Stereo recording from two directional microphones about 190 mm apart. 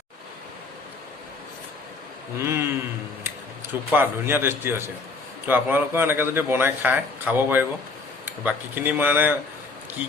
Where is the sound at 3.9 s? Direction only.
10° right (ahead or behind).